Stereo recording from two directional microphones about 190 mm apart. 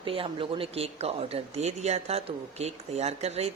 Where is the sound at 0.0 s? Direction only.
30° right (ahead or behind).